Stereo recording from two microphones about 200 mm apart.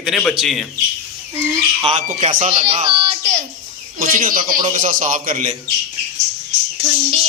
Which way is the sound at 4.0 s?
45° right (ahead or behind).